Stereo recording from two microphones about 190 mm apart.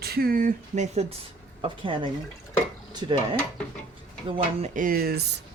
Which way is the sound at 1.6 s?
25° right (ahead or behind).